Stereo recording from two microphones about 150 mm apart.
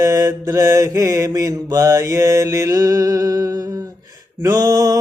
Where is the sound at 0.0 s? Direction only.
20° right (ahead or behind).